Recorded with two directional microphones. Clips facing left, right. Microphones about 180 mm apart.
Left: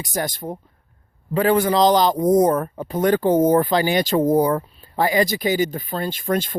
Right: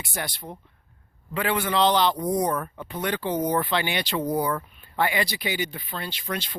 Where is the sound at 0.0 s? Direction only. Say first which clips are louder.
Left 8 dB; 40° left (ahead or behind).